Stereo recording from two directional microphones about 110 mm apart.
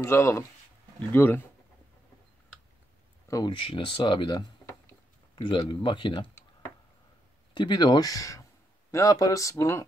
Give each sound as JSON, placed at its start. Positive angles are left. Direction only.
{"t": 0.0, "sound": "speech", "side_deg": 25}
{"t": 3.3, "sound": "speech", "side_deg": 30}
{"t": 3.5, "sound": "speech", "side_deg": 50}
{"t": 7.5, "sound": "speech", "side_deg": 45}